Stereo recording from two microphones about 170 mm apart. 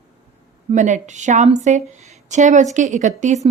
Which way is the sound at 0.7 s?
45° right (ahead or behind).